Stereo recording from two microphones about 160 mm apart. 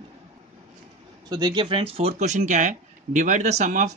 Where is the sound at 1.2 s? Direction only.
25° right (ahead or behind).